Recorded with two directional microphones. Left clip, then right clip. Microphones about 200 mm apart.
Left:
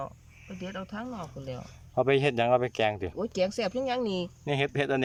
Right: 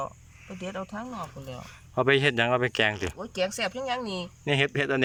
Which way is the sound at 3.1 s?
20° left (ahead or behind).